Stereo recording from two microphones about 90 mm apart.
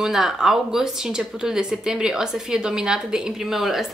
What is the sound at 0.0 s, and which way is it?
Speech, 5° right (ahead or behind).